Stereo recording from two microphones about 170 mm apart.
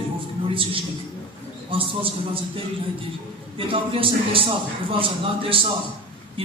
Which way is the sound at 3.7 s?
30° right (ahead or behind).